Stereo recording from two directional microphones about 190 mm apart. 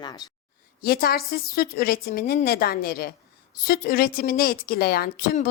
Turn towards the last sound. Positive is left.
turn(degrees=50)  # may be behind; listen again after turning